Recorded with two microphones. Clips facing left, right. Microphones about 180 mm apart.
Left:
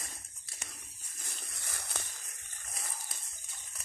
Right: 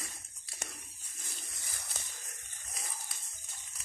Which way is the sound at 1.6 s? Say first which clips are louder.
Left 6 dB; 65° left (ahead or behind).